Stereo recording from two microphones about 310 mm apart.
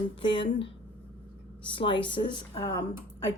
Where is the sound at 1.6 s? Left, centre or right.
Centre.